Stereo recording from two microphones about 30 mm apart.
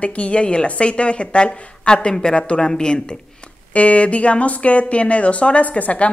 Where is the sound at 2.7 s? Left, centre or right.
Left.